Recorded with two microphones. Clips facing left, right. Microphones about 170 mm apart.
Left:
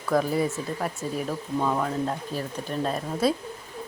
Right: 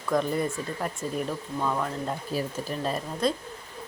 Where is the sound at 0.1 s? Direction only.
5° left (ahead or behind).